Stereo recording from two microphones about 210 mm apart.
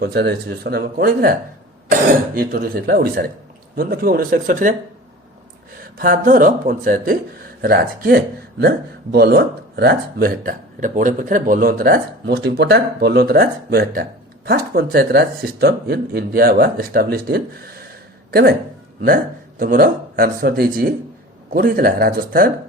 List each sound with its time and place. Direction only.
0.0 s speech: 50° right (ahead or behind)
6.0 s speech: 45° right (ahead or behind)